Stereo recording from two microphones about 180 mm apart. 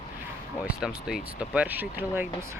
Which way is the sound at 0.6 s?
5° right (ahead or behind).